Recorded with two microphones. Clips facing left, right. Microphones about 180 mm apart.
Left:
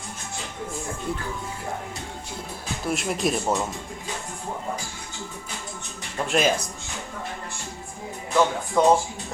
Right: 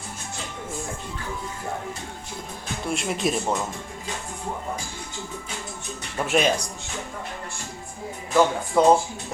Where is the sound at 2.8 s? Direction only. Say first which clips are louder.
Even; centre (ahead or behind).